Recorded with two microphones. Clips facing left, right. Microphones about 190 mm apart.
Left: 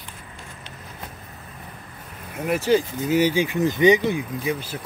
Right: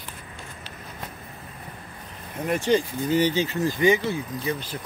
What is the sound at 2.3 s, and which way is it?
Speech, 5° left (ahead or behind).